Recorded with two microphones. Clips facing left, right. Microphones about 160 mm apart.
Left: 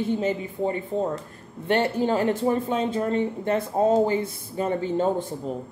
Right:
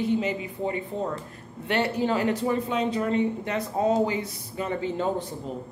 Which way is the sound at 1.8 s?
50° left (ahead or behind).